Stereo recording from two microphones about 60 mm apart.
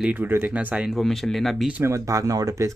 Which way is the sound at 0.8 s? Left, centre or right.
Centre.